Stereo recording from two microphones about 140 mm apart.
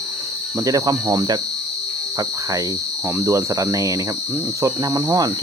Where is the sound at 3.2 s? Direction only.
20° right (ahead or behind).